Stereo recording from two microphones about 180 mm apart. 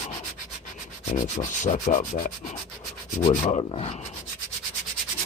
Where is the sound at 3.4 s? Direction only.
40° left (ahead or behind).